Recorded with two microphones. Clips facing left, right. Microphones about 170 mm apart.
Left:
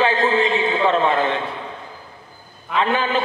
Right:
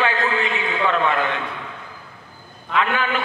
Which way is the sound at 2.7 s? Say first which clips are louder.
Left 2 dB; 30° left (ahead or behind).